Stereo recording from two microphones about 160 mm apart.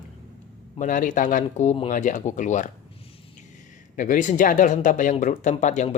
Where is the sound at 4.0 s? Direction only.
55° left (ahead or behind).